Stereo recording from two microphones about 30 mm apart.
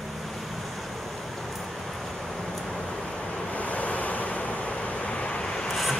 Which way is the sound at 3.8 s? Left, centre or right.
Left.